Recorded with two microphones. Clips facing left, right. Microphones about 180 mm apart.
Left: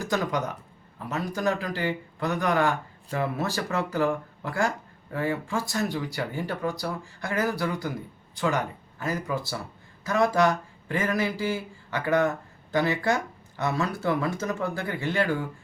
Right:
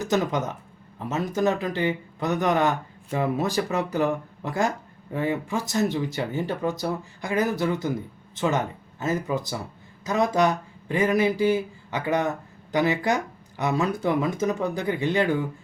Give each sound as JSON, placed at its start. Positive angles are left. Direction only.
{"t": 0.0, "sound": "speech", "side_deg": -20}